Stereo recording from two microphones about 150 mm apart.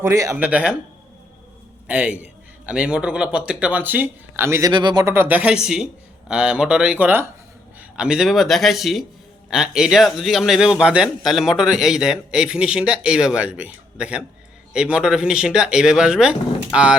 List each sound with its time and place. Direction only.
0.0 s speech: 20° right (ahead or behind)
0.4 s speech: 5° right (ahead or behind)
1.9 s speech: 10° right (ahead or behind)
4.7 s speech: 30° right (ahead or behind)
5.0 s a man's voice: 15° right (ahead or behind)